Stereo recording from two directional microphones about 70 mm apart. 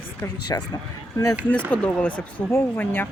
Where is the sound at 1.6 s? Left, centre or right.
Centre.